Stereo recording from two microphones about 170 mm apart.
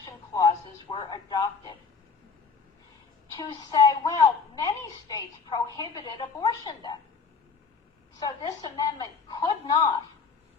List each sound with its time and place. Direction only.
0.0 s a sound: 25° left (ahead or behind)
3.3 s a woman's voice: 25° left (ahead or behind)
8.2 s a woman's voice: 25° left (ahead or behind)